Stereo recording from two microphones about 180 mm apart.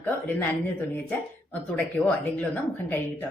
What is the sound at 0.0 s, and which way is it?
Speech, 10° left (ahead or behind).